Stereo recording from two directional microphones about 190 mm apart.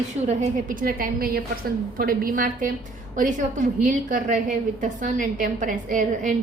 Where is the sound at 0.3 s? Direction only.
45° right (ahead or behind).